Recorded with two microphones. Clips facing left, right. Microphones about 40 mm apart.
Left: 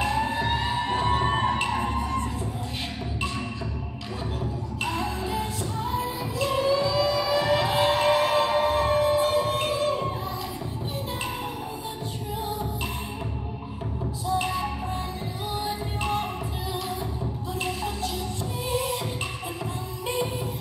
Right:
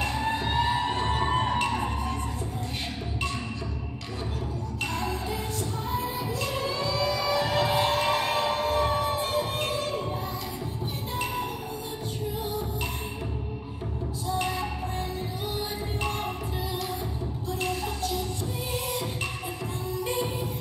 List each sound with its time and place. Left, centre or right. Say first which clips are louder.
0.9 s a sound: left 2 dB; left
5.9 s music: left 1 dB; left
8.4 s music: left 4 dB; left
8.9 s music: left 5 dB; left